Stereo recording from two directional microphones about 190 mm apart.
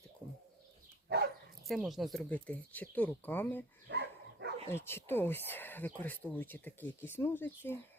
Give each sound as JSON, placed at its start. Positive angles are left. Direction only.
{"t": 1.6, "sound": "speech", "side_deg": 0}
{"t": 3.8, "sound": "dog", "side_deg": -65}
{"t": 4.7, "sound": "speech", "side_deg": 10}